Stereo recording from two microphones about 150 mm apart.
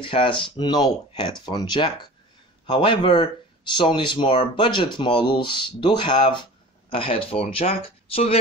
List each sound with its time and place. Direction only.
0.0 s speech: 35° left (ahead or behind)